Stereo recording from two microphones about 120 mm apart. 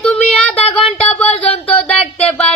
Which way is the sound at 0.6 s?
50° left (ahead or behind).